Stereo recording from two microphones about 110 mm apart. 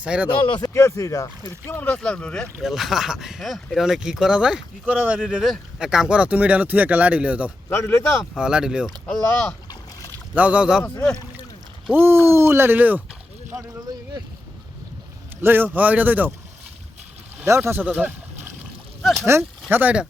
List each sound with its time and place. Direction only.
0.0 s speech: 10° right (ahead or behind)
0.3 s speech: 45° left (ahead or behind)
0.7 s speech: 25° left (ahead or behind)
1.8 s speech: 10° left (ahead or behind); by 7.5 s 10° right (ahead or behind)
7.7 s speech: 25° left (ahead or behind)
8.4 s speech: 5° right (ahead or behind)
10.3 s speech: 15° right (ahead or behind)
11.9 s speech: 20° right (ahead or behind)
13.5 s a sound: 30° right (ahead or behind)
15.4 s speech: 20° right (ahead or behind)
17.7 s speech: 15° right (ahead or behind)
19.2 s speech: 25° right (ahead or behind)
19.7 s speech: 10° right (ahead or behind)